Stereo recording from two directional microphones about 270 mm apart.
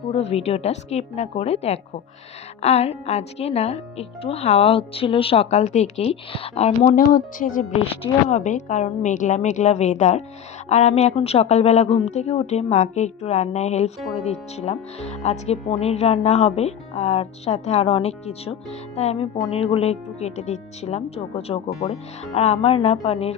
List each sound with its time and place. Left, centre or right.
0.1 s a woman's voice: left